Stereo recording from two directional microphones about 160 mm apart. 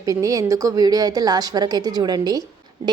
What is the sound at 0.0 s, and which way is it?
A woman's voice, 20° right (ahead or behind).